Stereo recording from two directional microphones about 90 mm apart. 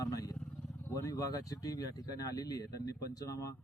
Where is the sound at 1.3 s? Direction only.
45° left (ahead or behind).